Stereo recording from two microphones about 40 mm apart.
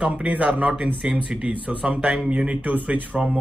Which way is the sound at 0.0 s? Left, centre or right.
Right.